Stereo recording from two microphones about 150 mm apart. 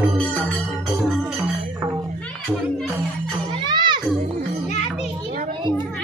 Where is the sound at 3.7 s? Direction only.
30° right (ahead or behind).